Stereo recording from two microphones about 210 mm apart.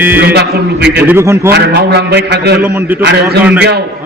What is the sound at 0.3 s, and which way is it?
Speech, 50° right (ahead or behind).